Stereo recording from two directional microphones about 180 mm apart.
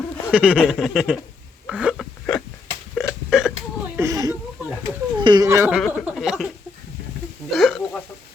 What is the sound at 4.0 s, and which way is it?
Speech, 20° right (ahead or behind).